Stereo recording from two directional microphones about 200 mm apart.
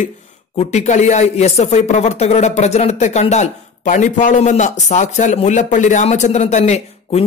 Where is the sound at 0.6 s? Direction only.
35° left (ahead or behind).